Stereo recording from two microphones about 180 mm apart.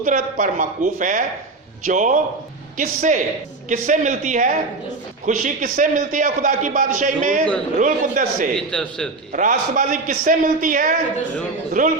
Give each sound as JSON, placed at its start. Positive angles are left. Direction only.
{"t": 0.0, "sound": "a man's voice", "side_deg": -45}
{"t": 8.5, "sound": "a man's voice", "side_deg": 5}
{"t": 9.3, "sound": "a man's voice", "side_deg": -45}